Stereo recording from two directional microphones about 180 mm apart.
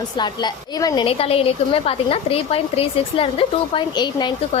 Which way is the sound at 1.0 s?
35° left (ahead or behind).